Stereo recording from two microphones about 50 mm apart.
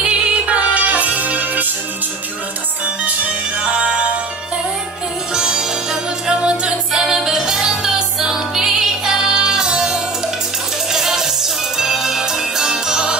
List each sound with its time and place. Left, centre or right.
0.0 s music: right
3.0 s music: right
5.3 s music: centre